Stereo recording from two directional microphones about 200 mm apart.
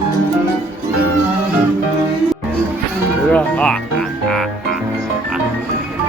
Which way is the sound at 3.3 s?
5° left (ahead or behind).